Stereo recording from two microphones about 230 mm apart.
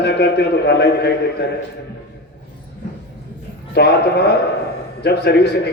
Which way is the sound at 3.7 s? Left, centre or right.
Left.